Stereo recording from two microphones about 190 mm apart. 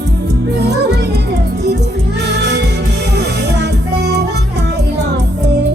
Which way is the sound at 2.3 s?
65° right (ahead or behind).